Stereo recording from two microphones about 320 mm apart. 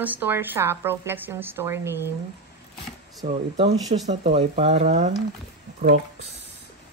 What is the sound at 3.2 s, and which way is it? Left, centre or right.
Speech, centre.